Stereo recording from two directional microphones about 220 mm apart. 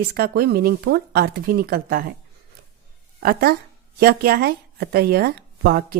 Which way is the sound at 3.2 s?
45° right (ahead or behind).